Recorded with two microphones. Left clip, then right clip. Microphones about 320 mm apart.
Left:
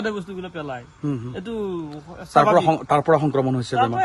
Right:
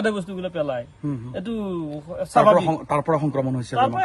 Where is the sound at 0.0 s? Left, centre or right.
Centre.